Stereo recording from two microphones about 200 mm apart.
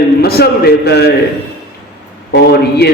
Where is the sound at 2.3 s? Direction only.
55° left (ahead or behind).